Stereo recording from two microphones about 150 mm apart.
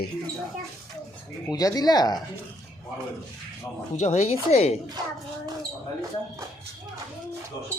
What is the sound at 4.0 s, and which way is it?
Speech, 45° left (ahead or behind).